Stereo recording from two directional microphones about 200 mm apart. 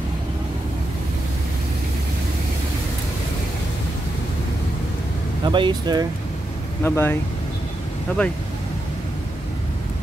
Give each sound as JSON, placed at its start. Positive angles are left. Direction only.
{"t": 5.4, "sound": "speech", "side_deg": -25}
{"t": 6.8, "sound": "speech", "side_deg": 10}